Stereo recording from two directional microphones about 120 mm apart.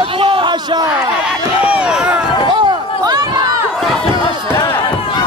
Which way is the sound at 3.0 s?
35° right (ahead or behind).